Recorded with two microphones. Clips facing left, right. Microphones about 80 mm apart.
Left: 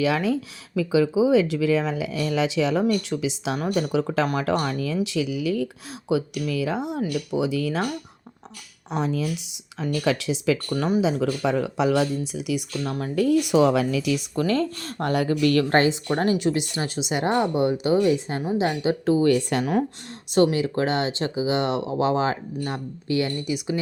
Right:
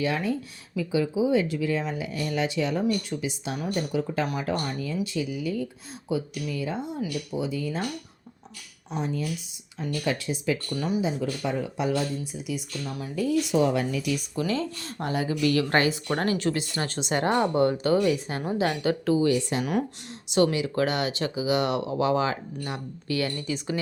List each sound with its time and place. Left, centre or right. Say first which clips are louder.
0.0 s speech: left 5 dB; left
6.1 s speech: left 5 dB; left
8.9 s speech: left 4 dB; left
10.7 s speech: left 5 dB; left
11.0 s speech: left 5 dB; left
12.8 s speech: left 6 dB; left
14.3 s speech: left 5 dB; left
15.4 s speech: left 2 dB; left
16.1 s speech: left 4 dB; left
18.1 s speech: left 4 dB; left
19.1 s speech: left 4 dB; left; by 23.8 s centre